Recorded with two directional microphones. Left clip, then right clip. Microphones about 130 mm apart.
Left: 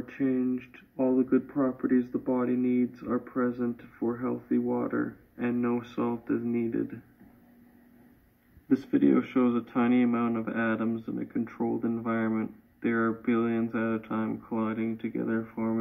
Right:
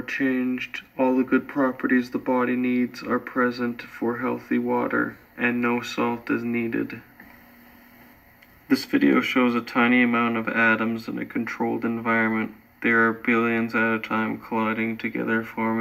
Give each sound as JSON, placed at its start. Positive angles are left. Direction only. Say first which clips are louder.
{"t": 0.0, "sound": "speech", "louder": "right 5 dB", "side_deg": 35}
{"t": 8.6, "sound": "speech", "louder": "right 4 dB", "side_deg": 35}